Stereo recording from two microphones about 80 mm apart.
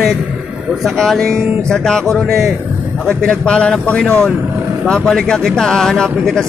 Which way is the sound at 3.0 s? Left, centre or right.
Centre.